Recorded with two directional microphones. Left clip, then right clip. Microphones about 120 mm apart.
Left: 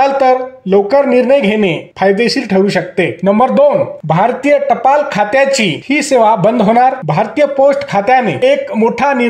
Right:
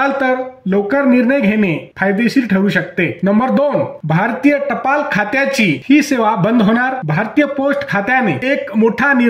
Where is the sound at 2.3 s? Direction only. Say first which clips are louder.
Left 3 dB; 25° left (ahead or behind).